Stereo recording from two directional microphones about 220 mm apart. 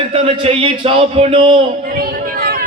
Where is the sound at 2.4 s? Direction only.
45° right (ahead or behind).